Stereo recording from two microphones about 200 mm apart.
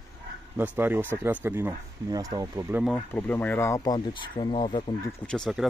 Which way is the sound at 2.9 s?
10° left (ahead or behind).